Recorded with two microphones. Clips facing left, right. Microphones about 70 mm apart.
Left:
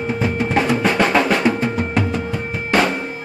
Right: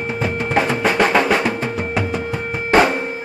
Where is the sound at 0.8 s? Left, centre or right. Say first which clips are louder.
Right 1 dB; centre.